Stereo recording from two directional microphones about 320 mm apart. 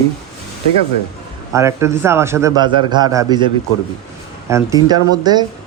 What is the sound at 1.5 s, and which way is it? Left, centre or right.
A man's voice, centre.